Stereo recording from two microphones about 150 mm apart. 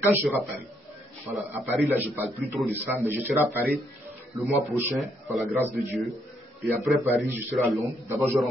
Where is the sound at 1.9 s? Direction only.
10° right (ahead or behind).